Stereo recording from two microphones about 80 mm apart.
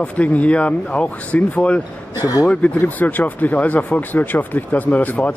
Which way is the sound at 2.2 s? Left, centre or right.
Left.